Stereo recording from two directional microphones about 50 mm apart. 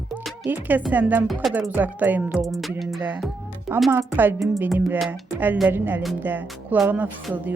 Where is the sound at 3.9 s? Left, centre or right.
Right.